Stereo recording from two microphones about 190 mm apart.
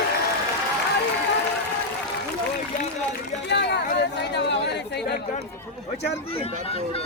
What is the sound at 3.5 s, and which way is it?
Speech, 60° left (ahead or behind).